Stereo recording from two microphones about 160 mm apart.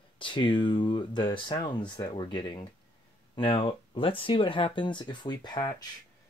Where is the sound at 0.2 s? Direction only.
30° left (ahead or behind).